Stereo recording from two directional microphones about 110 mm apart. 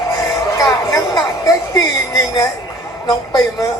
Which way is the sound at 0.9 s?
30° left (ahead or behind).